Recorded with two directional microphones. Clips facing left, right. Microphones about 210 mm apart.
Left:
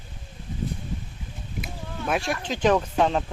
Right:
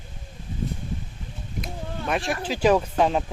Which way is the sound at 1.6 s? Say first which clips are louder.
Right 1 dB; centre (ahead or behind).